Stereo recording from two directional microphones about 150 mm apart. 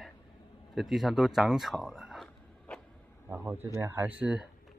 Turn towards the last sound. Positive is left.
turn(degrees=-10)  # may be behind; listen again after turning